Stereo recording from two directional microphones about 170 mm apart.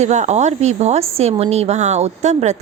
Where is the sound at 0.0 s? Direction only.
45° right (ahead or behind).